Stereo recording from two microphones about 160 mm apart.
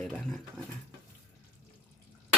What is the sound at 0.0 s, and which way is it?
Speech, 5° left (ahead or behind).